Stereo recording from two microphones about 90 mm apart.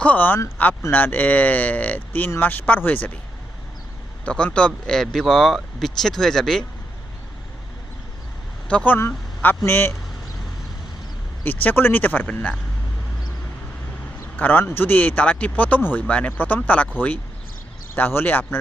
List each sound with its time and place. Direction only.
0.0 s speech: 20° left (ahead or behind)
4.3 s speech: 15° left (ahead or behind)
8.6 s speech: 15° left (ahead or behind)
11.4 s speech: 20° left (ahead or behind)
14.3 s speech: 20° left (ahead or behind)
17.9 s speech: 25° left (ahead or behind)